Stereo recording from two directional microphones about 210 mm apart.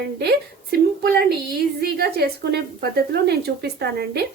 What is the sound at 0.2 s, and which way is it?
A woman's voice, 50° right (ahead or behind).